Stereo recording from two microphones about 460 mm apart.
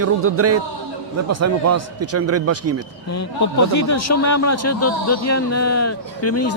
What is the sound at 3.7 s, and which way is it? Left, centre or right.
A man's voice, left.